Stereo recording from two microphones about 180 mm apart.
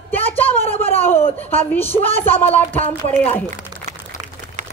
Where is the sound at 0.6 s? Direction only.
35° left (ahead or behind).